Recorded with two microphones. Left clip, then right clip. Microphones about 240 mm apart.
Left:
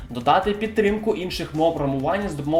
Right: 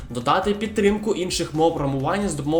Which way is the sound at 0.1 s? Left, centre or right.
Right.